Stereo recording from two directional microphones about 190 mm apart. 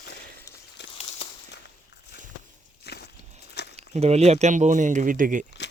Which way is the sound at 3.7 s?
35° right (ahead or behind).